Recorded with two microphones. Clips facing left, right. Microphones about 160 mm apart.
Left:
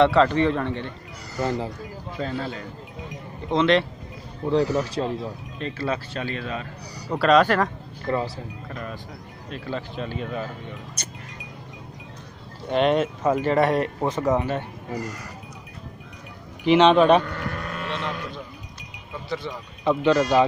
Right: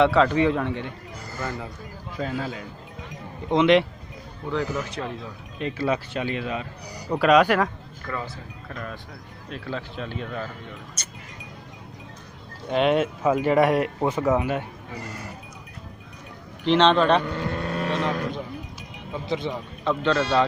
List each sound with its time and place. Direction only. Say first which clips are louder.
0.0 s speech: left 1 dB; 5° right (ahead or behind)
1.4 s speech: left 6 dB; 25° left (ahead or behind)
2.1 s speech: even; 10° right (ahead or behind)
4.5 s a man's voice: left 6 dB; 35° left (ahead or behind)
5.6 s speech: right 3 dB; 15° right (ahead or behind)
8.0 s speech: left 7 dB; 30° left (ahead or behind)
8.6 s speech: right 2 dB; 5° left (ahead or behind)
12.6 s speech: left 1 dB; centre (ahead or behind)
15.0 s speech: left 3 dB; 25° right (ahead or behind)
16.6 s speech: left 3 dB; 10° left (ahead or behind)
17.2 s vehicle: right 3 dB; 25° right (ahead or behind); by 18.0 s 40° right (ahead or behind)
19.2 s speech: right 3 dB; 20° right (ahead or behind)
19.8 s speech: left 4 dB; 15° left (ahead or behind)